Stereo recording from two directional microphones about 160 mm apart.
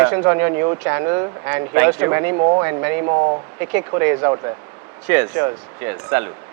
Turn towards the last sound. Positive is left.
turn(degrees=-15)  # may be behind; listen again after turning